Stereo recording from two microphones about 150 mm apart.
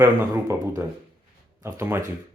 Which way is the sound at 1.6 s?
20° right (ahead or behind).